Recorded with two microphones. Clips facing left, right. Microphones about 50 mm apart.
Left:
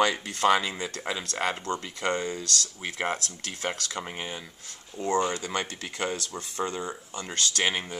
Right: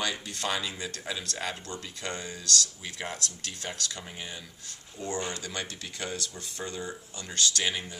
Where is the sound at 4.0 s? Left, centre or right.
Left.